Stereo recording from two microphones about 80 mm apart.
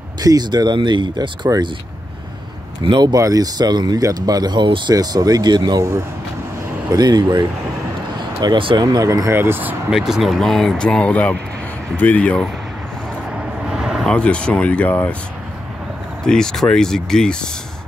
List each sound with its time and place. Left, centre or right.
0.2 s speech: right
2.8 s speech: right
3.1 s speech: right
4.9 s speech: right
5.8 s speech: right
6.9 s speech: right
8.4 s speech: right
8.8 s speech: right
9.3 s speech: right
9.8 s speech: centre
13.7 s vehicle: centre
14.0 s speech: centre
16.3 s speech: centre